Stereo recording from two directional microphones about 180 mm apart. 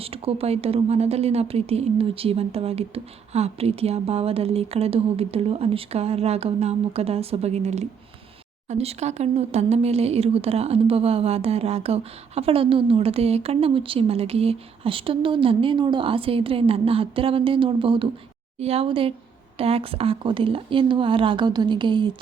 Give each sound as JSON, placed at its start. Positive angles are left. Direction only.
{"t": 0.0, "sound": "speech", "side_deg": -35}